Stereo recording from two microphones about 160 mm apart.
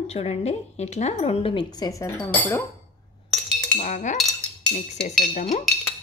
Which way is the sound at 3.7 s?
50° left (ahead or behind).